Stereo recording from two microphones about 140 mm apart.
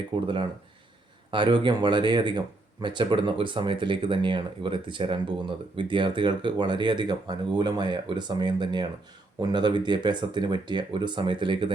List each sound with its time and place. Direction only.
0.1 s speech: 35° right (ahead or behind)